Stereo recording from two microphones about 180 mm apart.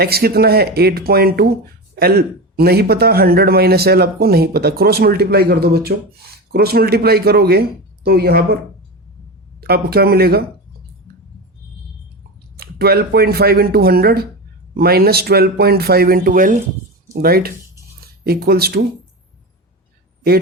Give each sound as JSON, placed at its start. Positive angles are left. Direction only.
{"t": 0.0, "sound": "speech", "side_deg": -60}
{"t": 9.6, "sound": "speech", "side_deg": -60}
{"t": 12.5, "sound": "speech", "side_deg": -60}